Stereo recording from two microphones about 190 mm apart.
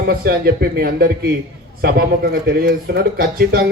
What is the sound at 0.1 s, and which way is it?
A man's voice, 55° right (ahead or behind).